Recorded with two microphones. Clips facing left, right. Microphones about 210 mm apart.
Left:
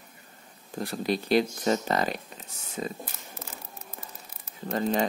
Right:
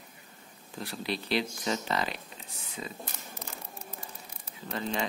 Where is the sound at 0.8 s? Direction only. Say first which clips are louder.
Left 6 dB; 45° left (ahead or behind).